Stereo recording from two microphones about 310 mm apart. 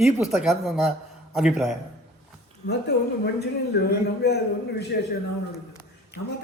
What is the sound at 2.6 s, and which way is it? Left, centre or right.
A man's voice, left.